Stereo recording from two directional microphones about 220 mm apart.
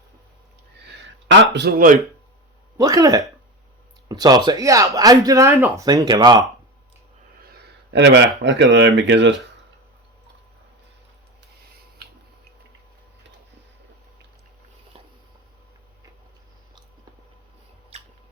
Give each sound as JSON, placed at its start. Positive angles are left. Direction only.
{"t": 1.3, "sound": "a man's voice", "side_deg": -55}
{"t": 2.7, "sound": "speech", "side_deg": -15}
{"t": 7.5, "sound": "speech", "side_deg": -45}
{"t": 17.9, "sound": "squish", "side_deg": -30}